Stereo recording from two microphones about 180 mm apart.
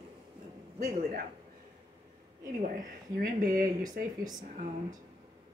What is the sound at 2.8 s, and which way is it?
Speech, 55° right (ahead or behind).